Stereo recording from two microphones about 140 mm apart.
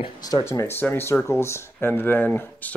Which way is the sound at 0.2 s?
25° left (ahead or behind).